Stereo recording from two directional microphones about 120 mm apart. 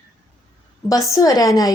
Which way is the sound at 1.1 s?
30° left (ahead or behind).